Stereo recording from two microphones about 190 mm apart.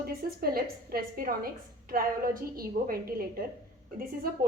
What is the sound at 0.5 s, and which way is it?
A woman's voice, 50° right (ahead or behind).